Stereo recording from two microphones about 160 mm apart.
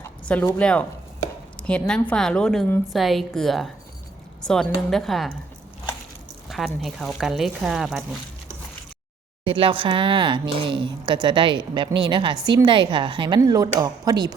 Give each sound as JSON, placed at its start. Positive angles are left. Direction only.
{"t": 0.6, "sound": "a woman's voice", "side_deg": 5}
{"t": 6.5, "sound": "speech", "side_deg": 0}
{"t": 9.4, "sound": "speech", "side_deg": -35}